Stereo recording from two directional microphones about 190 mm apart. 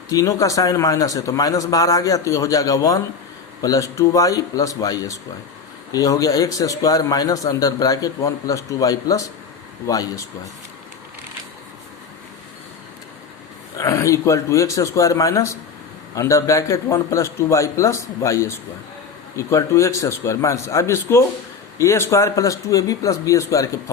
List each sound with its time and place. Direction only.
0.1 s a man's voice: 15° left (ahead or behind)
13.7 s a man's voice: 15° left (ahead or behind)